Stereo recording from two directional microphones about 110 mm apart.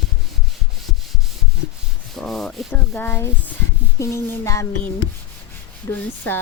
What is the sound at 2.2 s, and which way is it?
Sanding, centre (ahead or behind).